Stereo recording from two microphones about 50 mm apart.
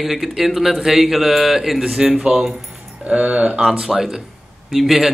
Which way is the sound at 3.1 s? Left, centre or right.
Right.